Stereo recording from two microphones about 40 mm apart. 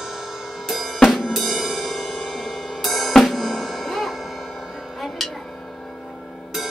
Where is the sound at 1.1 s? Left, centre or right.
Centre.